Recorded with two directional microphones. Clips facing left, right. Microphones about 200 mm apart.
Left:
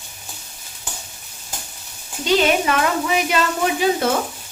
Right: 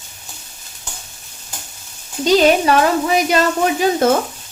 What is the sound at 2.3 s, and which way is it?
A woman's voice, 35° right (ahead or behind).